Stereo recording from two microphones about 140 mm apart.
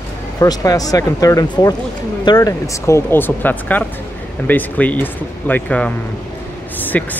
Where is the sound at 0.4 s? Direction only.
25° left (ahead or behind); by 5.9 s 10° left (ahead or behind).